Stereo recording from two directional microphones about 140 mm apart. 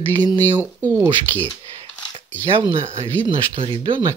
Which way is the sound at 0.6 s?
20° right (ahead or behind).